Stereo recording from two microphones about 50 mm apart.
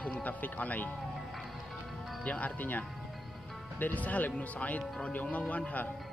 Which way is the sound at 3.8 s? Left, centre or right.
Left.